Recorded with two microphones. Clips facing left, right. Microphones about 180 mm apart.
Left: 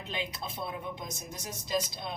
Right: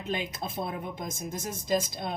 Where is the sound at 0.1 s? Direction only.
45° right (ahead or behind).